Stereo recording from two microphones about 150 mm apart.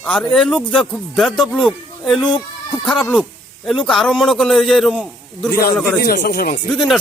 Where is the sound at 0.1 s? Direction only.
5° left (ahead or behind).